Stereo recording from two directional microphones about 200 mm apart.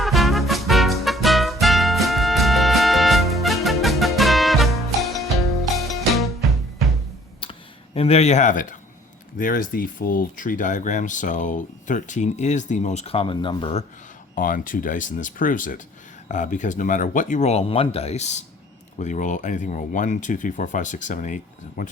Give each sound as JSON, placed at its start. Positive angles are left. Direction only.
{"t": 0.0, "sound": "music", "side_deg": 0}
{"t": 7.4, "sound": "a sound", "side_deg": 25}
{"t": 7.9, "sound": "speech", "side_deg": 30}
{"t": 14.3, "sound": "speech", "side_deg": 45}